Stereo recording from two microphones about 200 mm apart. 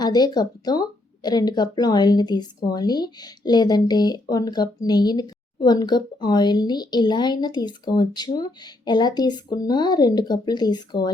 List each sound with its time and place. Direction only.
0.0 s speech: 20° left (ahead or behind)